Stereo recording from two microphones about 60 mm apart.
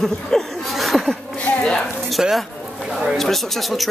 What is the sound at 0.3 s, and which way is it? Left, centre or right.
Chuckle, centre.